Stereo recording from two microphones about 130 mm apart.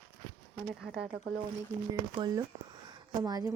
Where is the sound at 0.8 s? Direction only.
5° right (ahead or behind).